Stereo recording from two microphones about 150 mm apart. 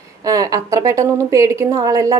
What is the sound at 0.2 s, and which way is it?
A woman's voice, 25° right (ahead or behind).